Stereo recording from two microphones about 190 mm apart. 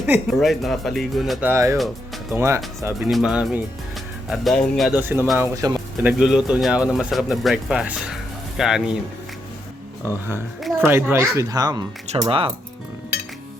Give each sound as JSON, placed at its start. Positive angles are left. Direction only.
{"t": 0.0, "sound": "speech", "side_deg": -5}
{"t": 2.8, "sound": "speech", "side_deg": -5}
{"t": 4.9, "sound": "speech", "side_deg": -10}
{"t": 6.0, "sound": "speech", "side_deg": -5}
{"t": 10.6, "sound": "a sound", "side_deg": -10}
{"t": 11.1, "sound": "speech", "side_deg": -15}